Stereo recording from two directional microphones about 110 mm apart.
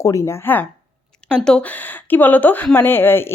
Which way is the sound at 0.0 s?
25° left (ahead or behind).